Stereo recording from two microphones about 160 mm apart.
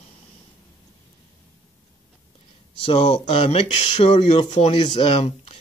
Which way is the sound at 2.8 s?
40° left (ahead or behind).